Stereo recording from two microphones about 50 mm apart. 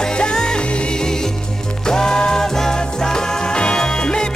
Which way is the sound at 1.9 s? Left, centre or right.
Centre.